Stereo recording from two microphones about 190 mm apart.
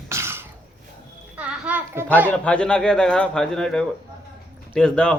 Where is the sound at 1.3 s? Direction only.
10° right (ahead or behind).